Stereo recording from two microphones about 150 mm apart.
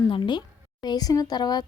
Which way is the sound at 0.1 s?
30° left (ahead or behind).